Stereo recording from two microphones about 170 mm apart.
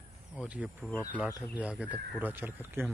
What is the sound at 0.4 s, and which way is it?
Speech, 5° right (ahead or behind).